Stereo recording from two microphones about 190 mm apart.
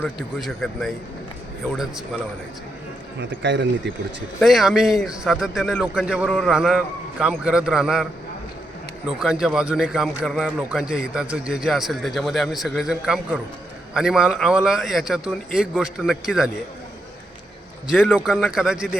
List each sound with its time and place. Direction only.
0.0 s a man's voice: centre (ahead or behind)
3.2 s a man's voice: 70° right (ahead or behind)
4.4 s a man's voice: centre (ahead or behind)
9.0 s a man's voice: 5° right (ahead or behind)
17.8 s a man's voice: 5° right (ahead or behind)